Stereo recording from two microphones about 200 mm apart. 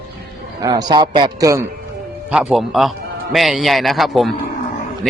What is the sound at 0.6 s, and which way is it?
A man's voice, 20° right (ahead or behind).